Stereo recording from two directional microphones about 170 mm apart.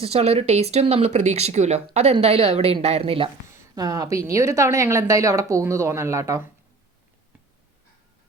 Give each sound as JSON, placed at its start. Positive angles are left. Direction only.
{"t": 0.0, "sound": "speech", "side_deg": -35}
{"t": 3.5, "sound": "speech", "side_deg": -20}